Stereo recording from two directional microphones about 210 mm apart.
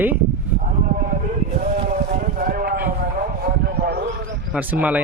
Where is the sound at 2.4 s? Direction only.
45° right (ahead or behind).